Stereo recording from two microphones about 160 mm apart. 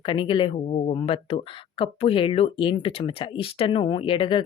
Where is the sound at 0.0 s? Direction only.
30° left (ahead or behind).